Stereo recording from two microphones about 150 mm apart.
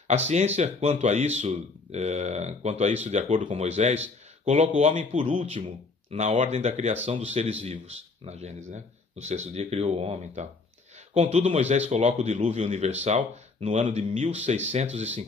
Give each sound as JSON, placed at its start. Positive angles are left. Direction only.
{"t": 0.1, "sound": "speech", "side_deg": -50}